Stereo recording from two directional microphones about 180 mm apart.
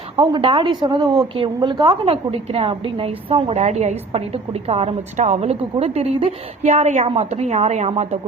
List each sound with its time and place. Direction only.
0.2 s a woman's voice: 30° right (ahead or behind)